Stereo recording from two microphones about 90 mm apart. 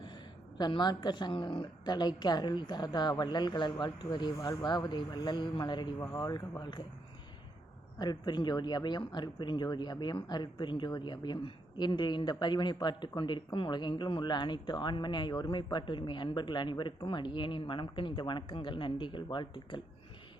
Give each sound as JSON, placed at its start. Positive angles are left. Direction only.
{"t": 0.6, "sound": "speech", "side_deg": 55}
{"t": 7.9, "sound": "speech", "side_deg": 55}